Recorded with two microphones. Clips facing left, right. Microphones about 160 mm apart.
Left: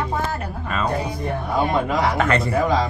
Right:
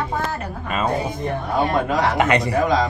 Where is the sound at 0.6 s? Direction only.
20° right (ahead or behind).